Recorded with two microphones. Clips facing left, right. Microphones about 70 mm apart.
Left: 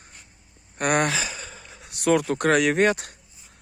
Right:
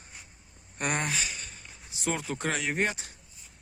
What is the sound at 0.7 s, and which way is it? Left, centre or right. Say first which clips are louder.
Speech: left 8 dB; left.